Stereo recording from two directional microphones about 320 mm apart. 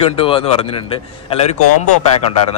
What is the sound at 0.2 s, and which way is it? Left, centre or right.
Speech, centre.